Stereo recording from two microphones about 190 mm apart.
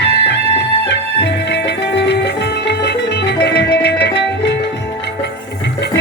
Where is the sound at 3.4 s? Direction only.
65° left (ahead or behind).